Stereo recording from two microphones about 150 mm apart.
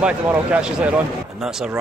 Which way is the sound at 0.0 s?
10° right (ahead or behind).